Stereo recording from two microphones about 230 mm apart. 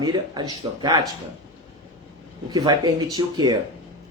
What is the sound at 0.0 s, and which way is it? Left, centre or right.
Speech, centre.